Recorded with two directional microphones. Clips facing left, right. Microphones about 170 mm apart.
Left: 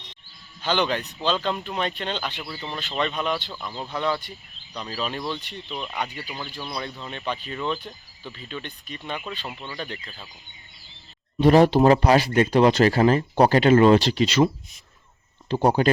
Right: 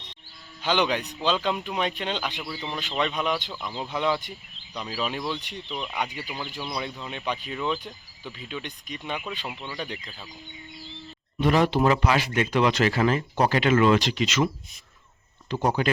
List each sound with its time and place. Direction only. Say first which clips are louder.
0.6 s speech: even; 10° right (ahead or behind)
3.5 s speech: even; centre (ahead or behind)
3.8 s speech: even; 15° right (ahead or behind)
4.7 s speech: even; 5° right (ahead or behind)
11.3 s speech: left 6 dB; 35° left (ahead or behind)